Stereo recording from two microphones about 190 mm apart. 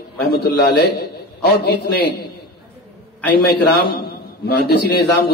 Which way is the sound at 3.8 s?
55° left (ahead or behind).